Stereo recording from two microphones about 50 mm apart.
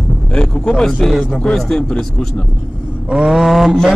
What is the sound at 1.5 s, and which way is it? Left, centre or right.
Speech, centre.